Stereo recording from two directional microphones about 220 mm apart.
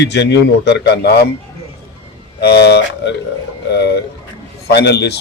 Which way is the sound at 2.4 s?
50° left (ahead or behind).